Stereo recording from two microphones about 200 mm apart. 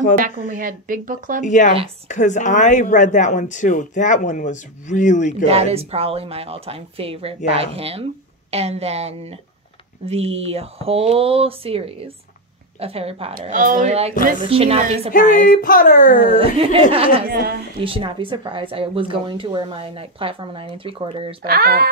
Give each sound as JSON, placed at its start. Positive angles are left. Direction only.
{"t": 0.5, "sound": "speech", "side_deg": -45}
{"t": 1.4, "sound": "speech", "side_deg": 40}
{"t": 5.4, "sound": "a woman's voice", "side_deg": -30}
{"t": 13.5, "sound": "a woman's voice", "side_deg": -40}
{"t": 15.1, "sound": "speech", "side_deg": 45}
{"t": 16.3, "sound": "a woman's voice", "side_deg": -30}
{"t": 17.3, "sound": "speech", "side_deg": -55}
{"t": 17.8, "sound": "a woman's voice", "side_deg": -25}
{"t": 21.5, "sound": "speech", "side_deg": -50}